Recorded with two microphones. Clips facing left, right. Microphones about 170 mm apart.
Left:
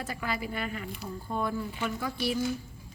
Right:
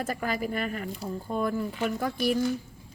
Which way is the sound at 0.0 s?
45° right (ahead or behind).